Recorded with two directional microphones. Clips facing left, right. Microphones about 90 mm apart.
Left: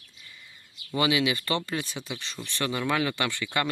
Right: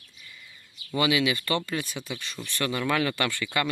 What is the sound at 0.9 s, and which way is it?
Speech, 25° left (ahead or behind).